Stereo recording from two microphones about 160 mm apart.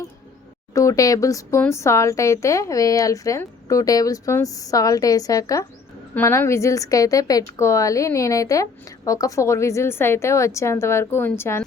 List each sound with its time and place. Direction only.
0.7 s a woman's voice: 20° left (ahead or behind)